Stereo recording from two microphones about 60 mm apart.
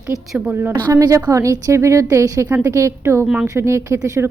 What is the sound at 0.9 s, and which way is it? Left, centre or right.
A woman's voice, right.